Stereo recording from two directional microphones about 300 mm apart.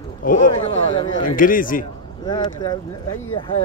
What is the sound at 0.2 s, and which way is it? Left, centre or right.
Speech, left.